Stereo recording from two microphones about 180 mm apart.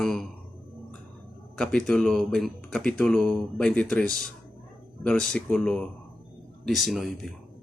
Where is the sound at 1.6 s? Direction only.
5° left (ahead or behind).